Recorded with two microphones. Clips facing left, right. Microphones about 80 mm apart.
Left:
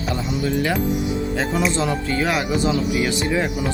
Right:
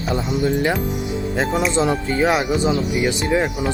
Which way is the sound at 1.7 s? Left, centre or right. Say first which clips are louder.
Right 3 dB; right.